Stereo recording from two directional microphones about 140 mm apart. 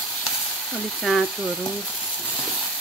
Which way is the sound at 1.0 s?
Centre (ahead or behind).